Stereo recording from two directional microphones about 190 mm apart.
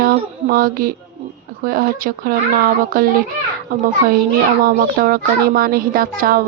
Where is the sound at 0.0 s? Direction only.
50° right (ahead or behind).